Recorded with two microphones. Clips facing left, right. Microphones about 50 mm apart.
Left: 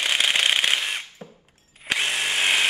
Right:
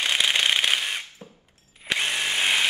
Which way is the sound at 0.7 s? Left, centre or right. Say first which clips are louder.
Left 1 dB; centre.